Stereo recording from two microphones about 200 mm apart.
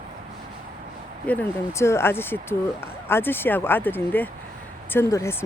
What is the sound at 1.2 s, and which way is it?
Speech, 10° left (ahead or behind).